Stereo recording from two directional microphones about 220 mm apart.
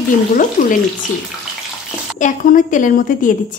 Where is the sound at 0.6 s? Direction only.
35° left (ahead or behind).